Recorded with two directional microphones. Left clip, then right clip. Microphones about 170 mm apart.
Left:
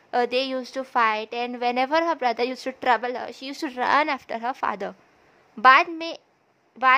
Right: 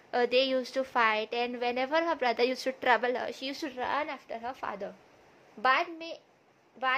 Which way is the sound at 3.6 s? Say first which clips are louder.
Left 12 dB; 40° left (ahead or behind).